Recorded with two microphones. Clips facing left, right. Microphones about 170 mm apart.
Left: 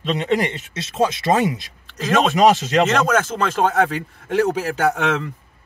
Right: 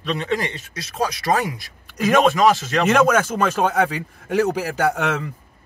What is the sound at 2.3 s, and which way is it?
Speech, 20° left (ahead or behind).